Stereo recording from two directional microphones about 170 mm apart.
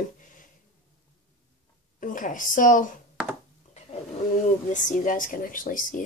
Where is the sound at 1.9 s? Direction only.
50° left (ahead or behind).